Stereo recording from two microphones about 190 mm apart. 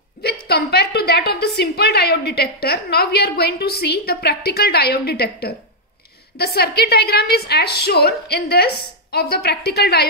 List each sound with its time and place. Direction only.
0.5 s a woman's voice: 55° left (ahead or behind)